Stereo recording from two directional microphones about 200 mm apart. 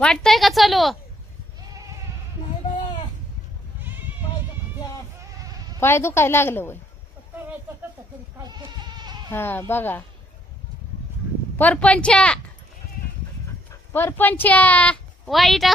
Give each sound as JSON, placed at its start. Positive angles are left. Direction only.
{"t": 0.0, "sound": "a woman's voice", "side_deg": 5}
{"t": 5.8, "sound": "a woman's voice", "side_deg": 10}
{"t": 8.4, "sound": "goat", "side_deg": -20}
{"t": 9.3, "sound": "a woman's voice", "side_deg": 10}
{"t": 11.5, "sound": "a woman's voice", "side_deg": 5}
{"t": 13.9, "sound": "a woman's voice", "side_deg": 10}